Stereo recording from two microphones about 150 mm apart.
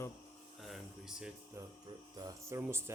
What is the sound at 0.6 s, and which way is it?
Speech, centre (ahead or behind).